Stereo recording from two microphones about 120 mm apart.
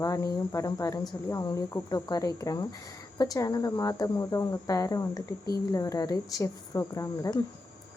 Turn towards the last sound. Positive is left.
turn(degrees=30)  # may be behind; listen again after turning